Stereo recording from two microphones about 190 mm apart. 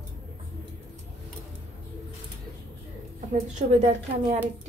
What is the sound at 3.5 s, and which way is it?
Speech, 35° right (ahead or behind).